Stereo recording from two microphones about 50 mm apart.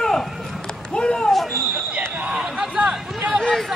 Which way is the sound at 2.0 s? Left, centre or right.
Right.